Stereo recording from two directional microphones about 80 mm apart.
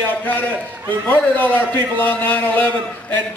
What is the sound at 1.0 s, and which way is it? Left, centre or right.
A man's voice, left.